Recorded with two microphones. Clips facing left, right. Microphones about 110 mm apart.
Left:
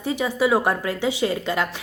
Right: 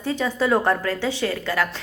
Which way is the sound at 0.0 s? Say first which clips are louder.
Left 1 dB; 15° left (ahead or behind).